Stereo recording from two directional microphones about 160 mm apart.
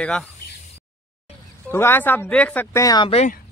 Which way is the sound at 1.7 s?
15° left (ahead or behind).